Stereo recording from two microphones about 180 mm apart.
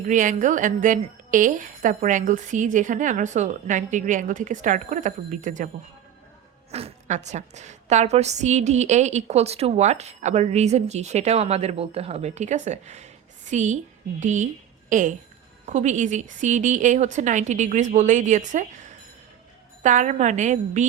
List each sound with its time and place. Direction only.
0.1 s a woman's voice: 45° right (ahead or behind)
6.7 s a woman's voice: 35° right (ahead or behind)